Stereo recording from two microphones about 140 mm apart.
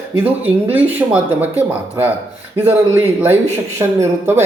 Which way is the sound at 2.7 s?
20° right (ahead or behind).